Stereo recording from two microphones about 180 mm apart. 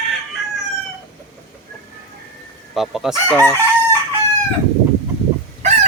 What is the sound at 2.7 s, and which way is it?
Chicken, centre (ahead or behind).